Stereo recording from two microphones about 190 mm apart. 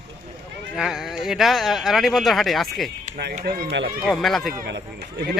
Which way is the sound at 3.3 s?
50° right (ahead or behind).